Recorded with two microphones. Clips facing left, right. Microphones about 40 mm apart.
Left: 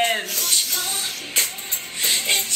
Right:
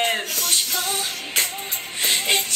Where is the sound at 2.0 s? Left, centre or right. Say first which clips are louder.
Right 1 dB; centre.